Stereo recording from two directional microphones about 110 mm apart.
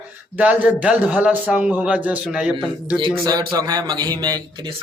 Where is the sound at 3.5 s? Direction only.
35° right (ahead or behind).